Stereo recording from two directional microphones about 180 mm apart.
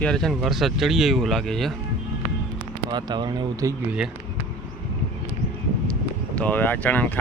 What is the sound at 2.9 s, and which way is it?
Speech, 25° right (ahead or behind).